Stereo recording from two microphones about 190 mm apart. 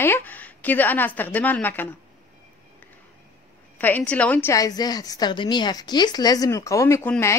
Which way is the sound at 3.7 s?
10° left (ahead or behind).